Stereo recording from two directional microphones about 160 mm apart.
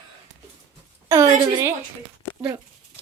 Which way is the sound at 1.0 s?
20° right (ahead or behind).